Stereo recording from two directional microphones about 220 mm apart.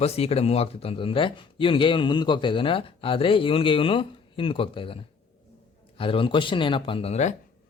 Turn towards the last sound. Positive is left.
turn(degrees=30)  # may be behind; listen again after turning